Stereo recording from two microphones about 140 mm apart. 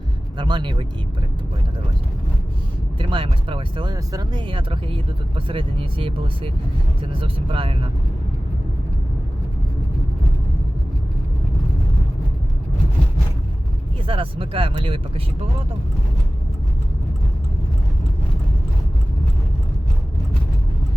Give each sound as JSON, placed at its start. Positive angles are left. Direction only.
{"t": 0.3, "sound": "speech", "side_deg": -35}
{"t": 3.0, "sound": "speech", "side_deg": -40}
{"t": 14.1, "sound": "speech", "side_deg": -40}